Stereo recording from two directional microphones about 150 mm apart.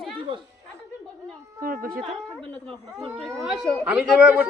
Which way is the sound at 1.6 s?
70° right (ahead or behind).